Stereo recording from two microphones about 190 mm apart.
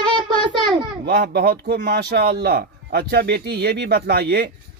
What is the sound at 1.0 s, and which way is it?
Speech, 60° right (ahead or behind).